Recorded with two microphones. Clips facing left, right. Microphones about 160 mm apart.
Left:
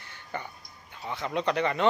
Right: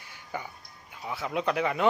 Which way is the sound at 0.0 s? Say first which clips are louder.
Even; 10° right (ahead or behind).